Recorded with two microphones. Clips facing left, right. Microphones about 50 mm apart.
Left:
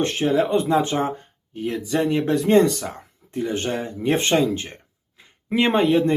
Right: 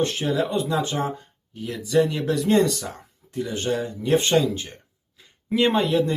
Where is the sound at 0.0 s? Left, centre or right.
Left.